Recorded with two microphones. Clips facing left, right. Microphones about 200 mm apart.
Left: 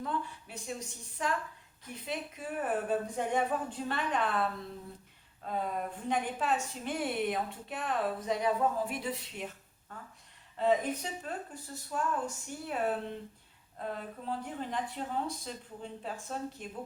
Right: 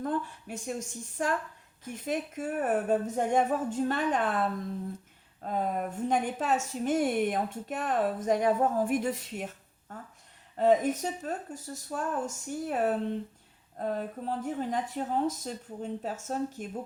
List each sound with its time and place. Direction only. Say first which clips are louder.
0.0 s a woman's voice: right 5 dB; 50° right (ahead or behind)
10.6 s a woman's voice: right 5 dB; 45° right (ahead or behind)